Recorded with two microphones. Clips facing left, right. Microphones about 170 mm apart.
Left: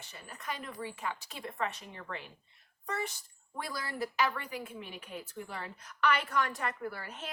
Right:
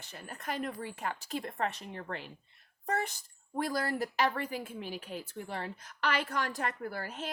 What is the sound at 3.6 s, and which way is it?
A woman's voice, 45° right (ahead or behind).